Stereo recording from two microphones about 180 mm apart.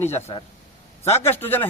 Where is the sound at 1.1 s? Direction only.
15° left (ahead or behind).